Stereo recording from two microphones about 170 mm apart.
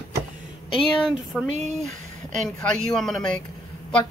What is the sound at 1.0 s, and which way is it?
Speech, centre (ahead or behind).